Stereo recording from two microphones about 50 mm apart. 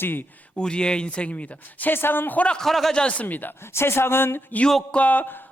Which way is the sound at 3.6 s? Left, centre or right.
Left.